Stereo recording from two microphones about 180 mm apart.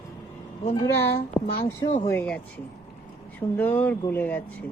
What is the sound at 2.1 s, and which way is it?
Speech, 5° left (ahead or behind).